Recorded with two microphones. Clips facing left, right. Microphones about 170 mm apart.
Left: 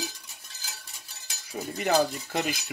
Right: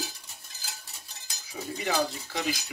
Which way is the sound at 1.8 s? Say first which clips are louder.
Left 5 dB; 55° left (ahead or behind).